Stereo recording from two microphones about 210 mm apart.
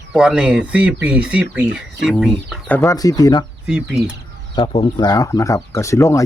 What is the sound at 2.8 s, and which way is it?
Speech, 15° left (ahead or behind).